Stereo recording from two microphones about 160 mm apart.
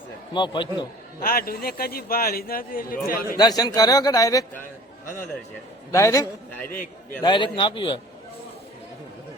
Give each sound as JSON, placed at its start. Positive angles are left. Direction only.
{"t": 0.3, "sound": "a man's voice", "side_deg": 30}
{"t": 1.2, "sound": "a man's voice", "side_deg": 65}
{"t": 3.3, "sound": "a man's voice", "side_deg": 25}
{"t": 5.9, "sound": "a man's voice", "side_deg": 20}
{"t": 7.2, "sound": "a man's voice", "side_deg": 30}